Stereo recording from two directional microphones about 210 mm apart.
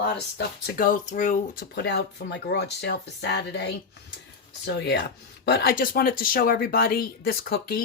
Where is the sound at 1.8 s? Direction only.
55° left (ahead or behind).